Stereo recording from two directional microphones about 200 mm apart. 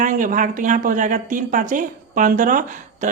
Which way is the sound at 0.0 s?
40° right (ahead or behind).